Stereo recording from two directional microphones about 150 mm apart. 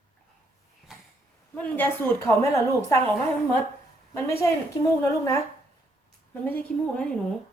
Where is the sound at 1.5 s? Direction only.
10° left (ahead or behind).